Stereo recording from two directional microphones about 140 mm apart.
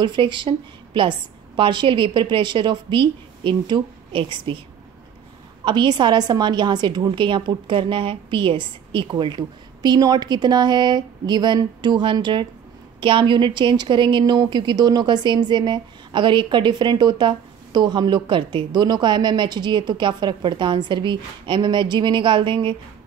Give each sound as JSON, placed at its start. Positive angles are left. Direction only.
{"t": 0.0, "sound": "a woman's voice", "side_deg": -35}
{"t": 5.7, "sound": "a woman's voice", "side_deg": -35}